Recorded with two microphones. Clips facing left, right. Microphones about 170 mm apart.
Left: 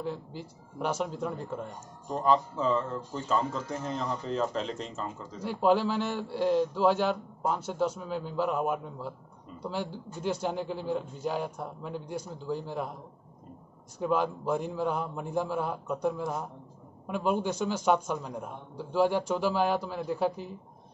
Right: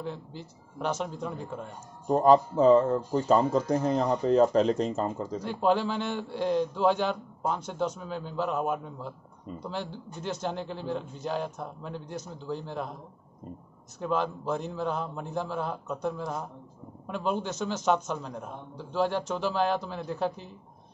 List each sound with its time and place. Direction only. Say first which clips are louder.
0.0 s a man's voice: left 1 dB; 5° left (ahead or behind)
2.0 s speech: right 6 dB; 45° right (ahead or behind)
5.4 s a man's voice: left 1 dB; 5° left (ahead or behind)
13.9 s a man's voice: left 1 dB; 10° left (ahead or behind)